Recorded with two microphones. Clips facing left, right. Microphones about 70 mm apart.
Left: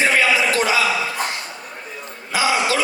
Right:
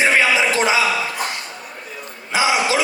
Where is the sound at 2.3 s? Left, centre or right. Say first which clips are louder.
Right 1 dB; right.